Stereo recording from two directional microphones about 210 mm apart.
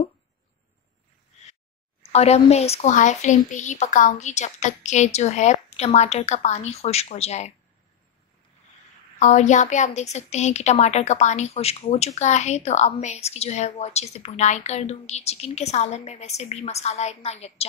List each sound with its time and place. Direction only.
2.1 s a woman's voice: 30° left (ahead or behind)
9.2 s a woman's voice: 35° left (ahead or behind)